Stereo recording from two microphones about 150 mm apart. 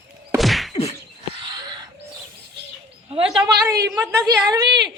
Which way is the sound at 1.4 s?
30° right (ahead or behind).